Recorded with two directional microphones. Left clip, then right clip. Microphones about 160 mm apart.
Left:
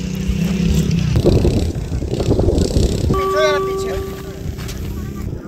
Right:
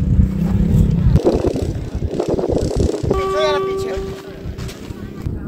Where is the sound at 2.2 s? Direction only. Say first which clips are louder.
Even; 35° right (ahead or behind).